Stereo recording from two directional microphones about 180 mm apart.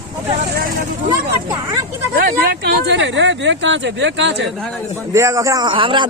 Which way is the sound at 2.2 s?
55° right (ahead or behind).